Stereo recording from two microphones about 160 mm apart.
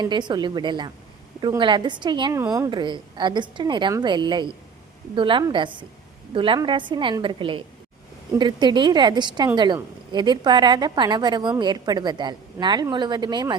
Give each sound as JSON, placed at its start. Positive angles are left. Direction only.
{"t": 0.0, "sound": "a woman's voice", "side_deg": -30}
{"t": 2.3, "sound": "a woman's voice", "side_deg": -20}
{"t": 2.6, "sound": "a woman's voice", "side_deg": -30}